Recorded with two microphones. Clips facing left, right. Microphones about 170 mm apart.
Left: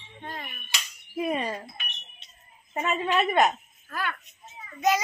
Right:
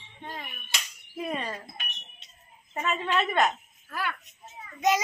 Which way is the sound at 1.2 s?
15° left (ahead or behind).